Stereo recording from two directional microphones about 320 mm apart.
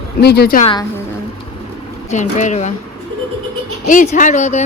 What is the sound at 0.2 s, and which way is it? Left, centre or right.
Speech, left.